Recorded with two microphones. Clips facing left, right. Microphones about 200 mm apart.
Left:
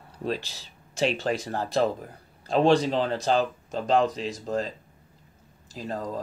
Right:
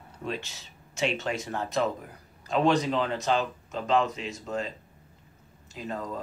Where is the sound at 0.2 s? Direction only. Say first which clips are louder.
Left 4 dB; 35° left (ahead or behind).